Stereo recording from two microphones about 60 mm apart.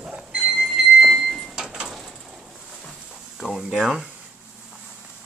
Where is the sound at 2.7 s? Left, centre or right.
Centre.